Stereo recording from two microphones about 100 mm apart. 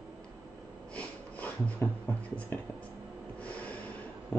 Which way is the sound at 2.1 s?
15° left (ahead or behind).